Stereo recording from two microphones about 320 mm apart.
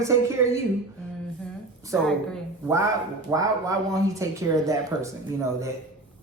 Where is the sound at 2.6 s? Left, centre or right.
Centre.